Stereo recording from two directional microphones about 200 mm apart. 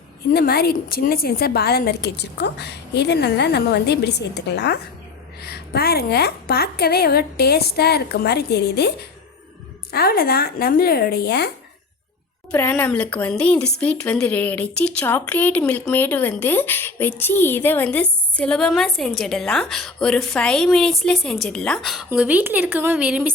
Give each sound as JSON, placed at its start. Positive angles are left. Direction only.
{"t": 0.3, "sound": "a woman's voice", "side_deg": 50}
{"t": 12.5, "sound": "a woman's voice", "side_deg": 10}